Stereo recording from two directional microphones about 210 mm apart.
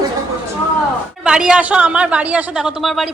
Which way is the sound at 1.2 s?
5° right (ahead or behind).